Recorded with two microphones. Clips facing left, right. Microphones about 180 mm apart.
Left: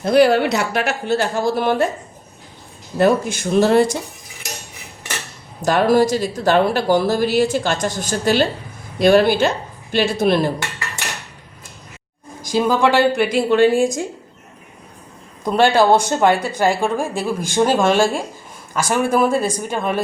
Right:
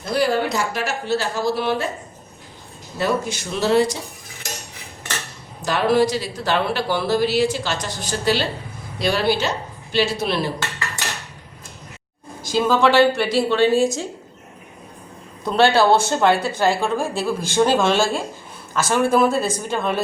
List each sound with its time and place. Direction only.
0.0 s a woman's voice: 65° left (ahead or behind)
3.0 s speech: 50° left (ahead or behind)
5.6 s speech: 45° left (ahead or behind)
10.6 s dishes: 20° left (ahead or behind)
12.5 s a woman's voice: 15° left (ahead or behind)
15.4 s a woman's voice: 15° left (ahead or behind)